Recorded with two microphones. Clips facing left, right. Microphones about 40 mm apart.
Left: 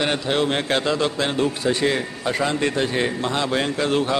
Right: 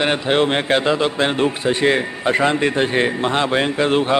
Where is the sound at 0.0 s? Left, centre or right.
Right.